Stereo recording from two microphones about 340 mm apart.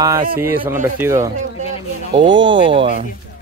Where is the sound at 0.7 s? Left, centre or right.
Centre.